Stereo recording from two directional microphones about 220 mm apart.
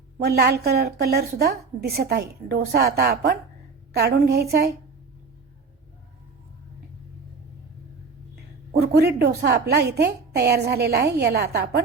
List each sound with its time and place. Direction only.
0.3 s a woman's voice: 45° right (ahead or behind)
9.0 s a woman's voice: 45° right (ahead or behind)